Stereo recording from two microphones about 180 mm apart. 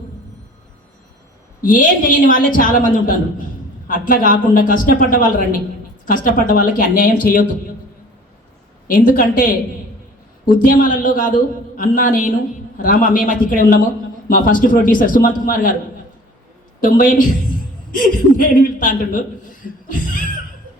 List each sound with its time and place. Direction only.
1.6 s a man's voice: 50° left (ahead or behind)
8.9 s a man's voice: 50° left (ahead or behind)
16.8 s a man's voice: 50° left (ahead or behind)
19.9 s a sound: 50° left (ahead or behind)